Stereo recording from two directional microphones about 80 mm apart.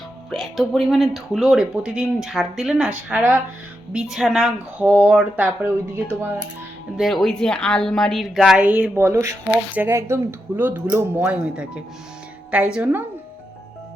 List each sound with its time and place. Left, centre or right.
0.3 s speech: centre
3.1 s speech: right
3.9 s a woman's voice: centre
4.8 s speech: centre
6.9 s speech: centre
8.6 s speech: centre; by 10.2 s right
10.6 s speech: right
11.2 s a woman's voice: centre